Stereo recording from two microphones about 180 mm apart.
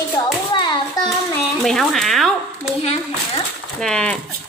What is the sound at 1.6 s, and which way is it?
Speech, centre (ahead or behind).